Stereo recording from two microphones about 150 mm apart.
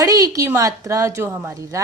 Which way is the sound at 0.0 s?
20° right (ahead or behind).